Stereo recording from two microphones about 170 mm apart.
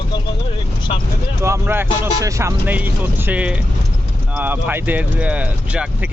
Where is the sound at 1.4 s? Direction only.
15° right (ahead or behind).